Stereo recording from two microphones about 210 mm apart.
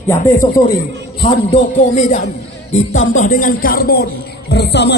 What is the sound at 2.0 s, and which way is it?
Speech, 35° left (ahead or behind).